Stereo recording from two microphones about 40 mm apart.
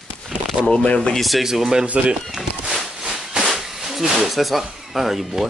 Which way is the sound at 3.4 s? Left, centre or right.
Centre.